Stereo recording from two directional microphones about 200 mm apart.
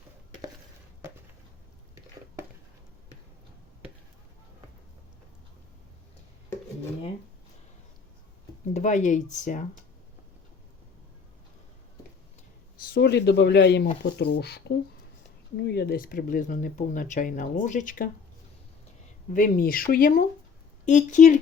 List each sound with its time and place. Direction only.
8.7 s speech: 40° left (ahead or behind)
12.9 s speech: 55° left (ahead or behind)
19.3 s speech: 45° left (ahead or behind)